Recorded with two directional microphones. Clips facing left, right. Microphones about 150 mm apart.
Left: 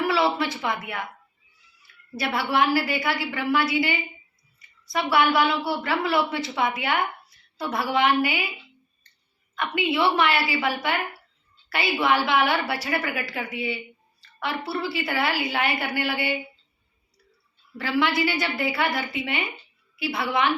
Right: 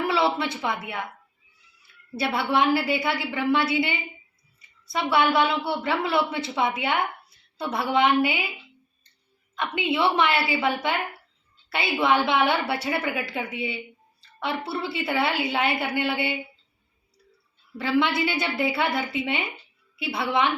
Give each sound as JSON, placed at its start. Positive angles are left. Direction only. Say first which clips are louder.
{"t": 0.0, "sound": "a sound", "louder": "left 1 dB", "side_deg": -25}
{"t": 0.3, "sound": "a woman's voice", "louder": "left 1 dB", "side_deg": -25}
{"t": 2.1, "sound": "a woman's voice", "louder": "even", "side_deg": -25}
{"t": 9.6, "sound": "a woman's voice", "louder": "left 1 dB", "side_deg": -25}
{"t": 17.7, "sound": "a woman's voice", "louder": "right 1 dB", "side_deg": -25}